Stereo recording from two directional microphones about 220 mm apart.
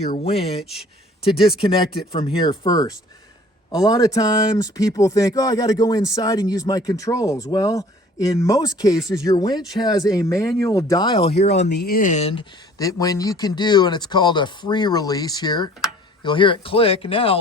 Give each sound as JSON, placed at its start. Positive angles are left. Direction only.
{"t": 0.2, "sound": "speech", "side_deg": 25}
{"t": 0.6, "sound": "speech", "side_deg": 0}
{"t": 1.2, "sound": "speech", "side_deg": 25}
{"t": 11.6, "sound": "speech", "side_deg": 50}